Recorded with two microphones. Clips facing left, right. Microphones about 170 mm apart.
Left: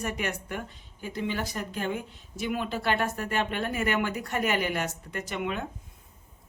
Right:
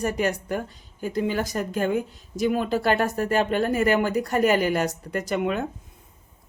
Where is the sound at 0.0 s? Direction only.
35° right (ahead or behind).